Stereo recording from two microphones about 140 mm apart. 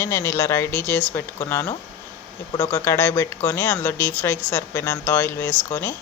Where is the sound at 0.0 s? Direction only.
20° left (ahead or behind).